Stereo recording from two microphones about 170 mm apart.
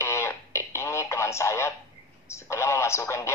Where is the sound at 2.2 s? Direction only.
15° left (ahead or behind).